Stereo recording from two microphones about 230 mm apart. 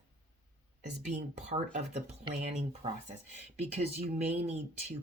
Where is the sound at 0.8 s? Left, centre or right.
Right.